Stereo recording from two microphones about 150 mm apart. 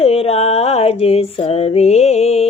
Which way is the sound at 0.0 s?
45° left (ahead or behind).